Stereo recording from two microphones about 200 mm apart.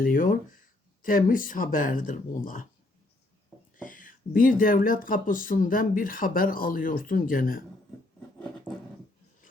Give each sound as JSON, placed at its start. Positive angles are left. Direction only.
{"t": 0.0, "sound": "speech", "side_deg": 45}
{"t": 3.8, "sound": "speech", "side_deg": 40}